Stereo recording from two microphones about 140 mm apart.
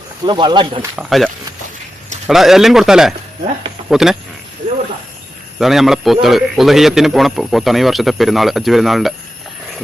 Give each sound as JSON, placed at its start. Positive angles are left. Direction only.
{"t": 0.3, "sound": "speech", "side_deg": -35}
{"t": 0.9, "sound": "speech", "side_deg": 0}
{"t": 5.5, "sound": "speech", "side_deg": 0}